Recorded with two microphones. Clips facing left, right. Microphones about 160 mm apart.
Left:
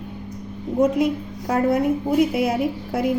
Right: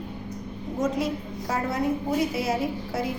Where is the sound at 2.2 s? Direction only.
55° left (ahead or behind).